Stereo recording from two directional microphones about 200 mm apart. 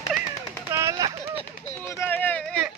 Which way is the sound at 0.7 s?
15° right (ahead or behind).